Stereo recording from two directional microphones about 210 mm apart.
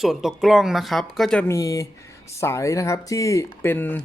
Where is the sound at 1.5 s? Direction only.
15° left (ahead or behind).